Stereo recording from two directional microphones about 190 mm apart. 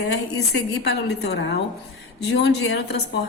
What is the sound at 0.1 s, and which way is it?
A woman's voice, 60° left (ahead or behind).